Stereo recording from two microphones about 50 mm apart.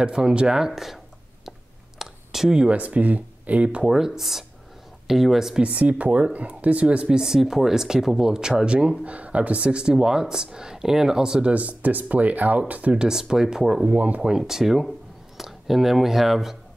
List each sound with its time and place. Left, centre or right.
0.0 s speech: centre
2.0 s a sound: centre
2.7 s speech: right
3.8 s speech: centre
5.7 s speech: right; by 8.7 s centre
8.7 s speech: right
11.5 s speech: right
12.9 s speech: centre
13.9 s speech: right
14.2 s speech: centre